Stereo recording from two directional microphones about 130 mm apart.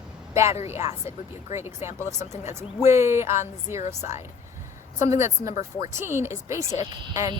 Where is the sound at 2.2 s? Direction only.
60° left (ahead or behind).